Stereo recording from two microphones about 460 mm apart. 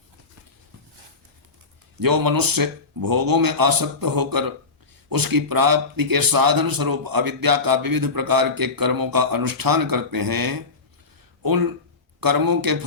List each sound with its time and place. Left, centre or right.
2.0 s a man's voice: right